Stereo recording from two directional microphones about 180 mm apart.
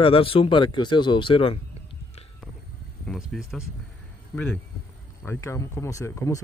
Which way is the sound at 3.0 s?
Centre (ahead or behind).